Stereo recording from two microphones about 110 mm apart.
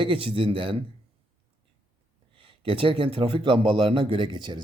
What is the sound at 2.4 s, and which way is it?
Speech, 50° right (ahead or behind).